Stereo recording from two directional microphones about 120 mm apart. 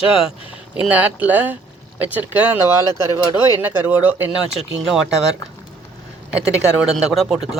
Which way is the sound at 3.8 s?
15° right (ahead or behind).